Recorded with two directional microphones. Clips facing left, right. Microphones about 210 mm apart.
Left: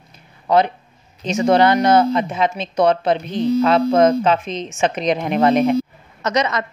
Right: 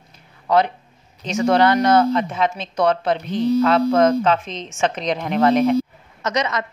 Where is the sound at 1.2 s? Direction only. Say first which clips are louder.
Left 2 dB; 20° left (ahead or behind).